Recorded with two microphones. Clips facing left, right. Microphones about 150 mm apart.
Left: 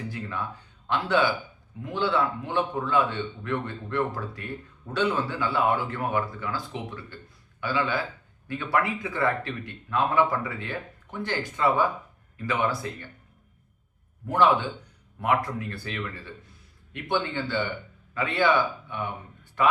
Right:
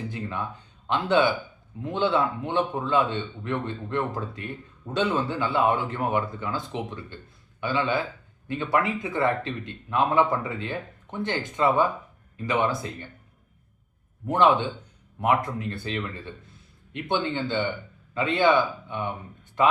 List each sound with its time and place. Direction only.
0.1 s a sound: 20° right (ahead or behind)
0.9 s speech: 20° right (ahead or behind)
14.3 s speech: 20° right (ahead or behind)